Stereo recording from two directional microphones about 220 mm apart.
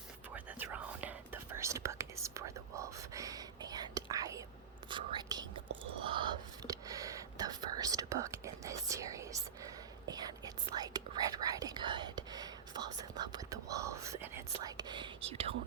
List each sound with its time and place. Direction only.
0.3 s whispering: 5° right (ahead or behind); by 15.5 s 25° right (ahead or behind)